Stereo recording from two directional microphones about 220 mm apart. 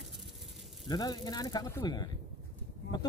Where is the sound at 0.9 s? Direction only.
20° left (ahead or behind).